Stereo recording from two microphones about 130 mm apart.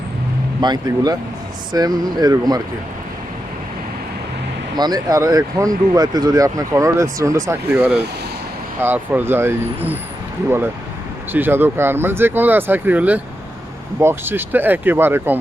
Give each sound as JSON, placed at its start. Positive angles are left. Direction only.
{"t": 0.6, "sound": "speech", "side_deg": -35}
{"t": 4.8, "sound": "speech", "side_deg": -30}
{"t": 7.7, "sound": "speech", "side_deg": -10}
{"t": 11.3, "sound": "speech", "side_deg": -15}